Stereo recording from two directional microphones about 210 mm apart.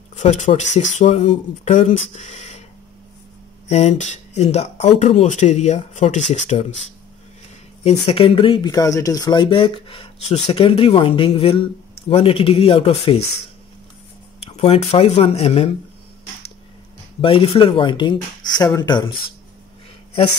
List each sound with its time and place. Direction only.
0.2 s speech: 35° left (ahead or behind)
3.6 s speech: 30° left (ahead or behind)
7.8 s speech: 25° left (ahead or behind)
14.6 s speech: 30° left (ahead or behind)
17.2 s speech: 25° left (ahead or behind)